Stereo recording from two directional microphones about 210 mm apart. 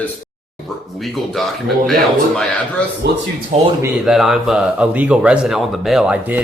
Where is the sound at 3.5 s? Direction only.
35° right (ahead or behind).